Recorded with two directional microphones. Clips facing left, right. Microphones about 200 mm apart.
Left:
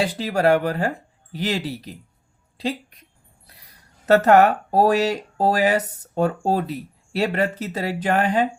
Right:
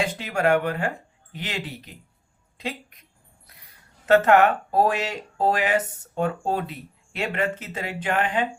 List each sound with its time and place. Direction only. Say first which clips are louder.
0.0 s speech: left 4 dB; 35° left (ahead or behind)
3.5 s a sound: left 3 dB; 35° left (ahead or behind)
4.0 s speech: left 2 dB; 40° left (ahead or behind)